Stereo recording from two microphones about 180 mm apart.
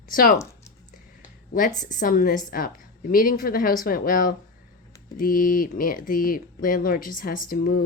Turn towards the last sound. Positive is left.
turn(degrees=50)  # may be behind; listen again after turning